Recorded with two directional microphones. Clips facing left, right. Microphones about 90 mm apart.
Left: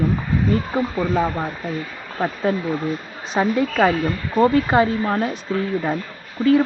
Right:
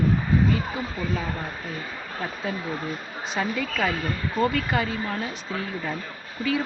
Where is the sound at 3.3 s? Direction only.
50° left (ahead or behind).